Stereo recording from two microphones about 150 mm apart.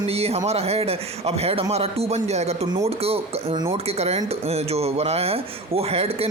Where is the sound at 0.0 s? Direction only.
40° right (ahead or behind).